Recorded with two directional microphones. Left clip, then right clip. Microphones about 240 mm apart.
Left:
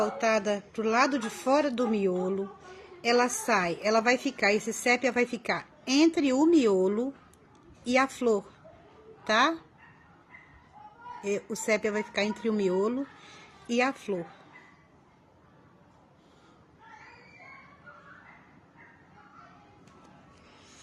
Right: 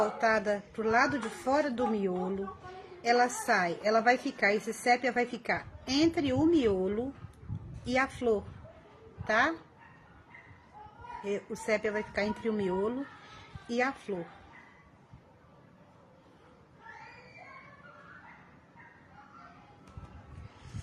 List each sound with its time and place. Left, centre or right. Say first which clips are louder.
0.0 s a woman's voice: left 1 dB; left
11.3 s a woman's voice: left 3 dB; left